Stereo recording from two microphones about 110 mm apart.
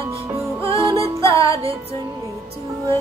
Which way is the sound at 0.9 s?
55° right (ahead or behind).